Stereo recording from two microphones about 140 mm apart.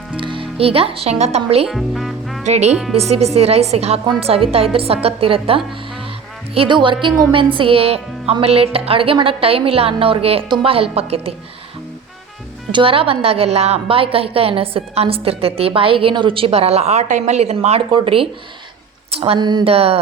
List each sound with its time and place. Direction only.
0.2 s a woman's voice: 35° right (ahead or behind)
1.6 s music: centre (ahead or behind)
2.4 s a woman's voice: 55° right (ahead or behind)
12.7 s a woman's voice: 40° right (ahead or behind)
19.4 s speech: 30° right (ahead or behind)
19.7 s a woman's voice: 45° right (ahead or behind)